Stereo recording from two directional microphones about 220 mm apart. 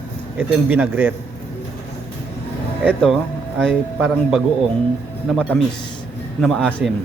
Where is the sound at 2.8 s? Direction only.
Centre (ahead or behind).